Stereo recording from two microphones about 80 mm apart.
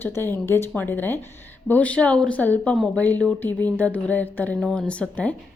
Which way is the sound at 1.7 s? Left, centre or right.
Centre.